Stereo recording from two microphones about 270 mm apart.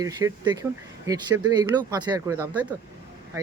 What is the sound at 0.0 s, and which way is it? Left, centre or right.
Speech, centre.